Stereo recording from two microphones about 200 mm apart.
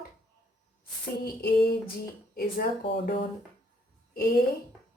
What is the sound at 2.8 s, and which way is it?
Speech, 25° left (ahead or behind).